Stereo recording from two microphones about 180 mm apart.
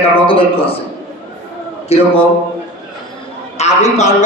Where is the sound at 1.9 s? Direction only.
35° left (ahead or behind).